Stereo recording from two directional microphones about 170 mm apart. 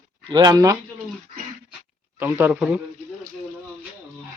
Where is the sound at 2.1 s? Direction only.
10° right (ahead or behind).